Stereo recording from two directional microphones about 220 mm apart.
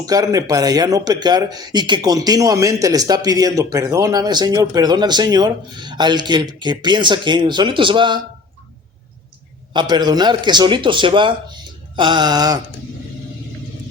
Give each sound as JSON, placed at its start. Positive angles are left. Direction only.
{"t": 0.0, "sound": "speech", "side_deg": -15}
{"t": 9.7, "sound": "a man's voice", "side_deg": -20}